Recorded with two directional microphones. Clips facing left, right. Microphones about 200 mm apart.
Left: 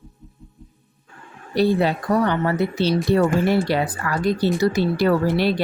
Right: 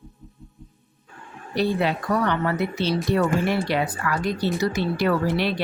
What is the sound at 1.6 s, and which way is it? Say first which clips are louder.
Speech: left 4 dB; 35° left (ahead or behind).